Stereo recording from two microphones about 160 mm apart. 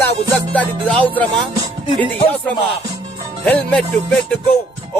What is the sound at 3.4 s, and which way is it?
Music, 5° left (ahead or behind).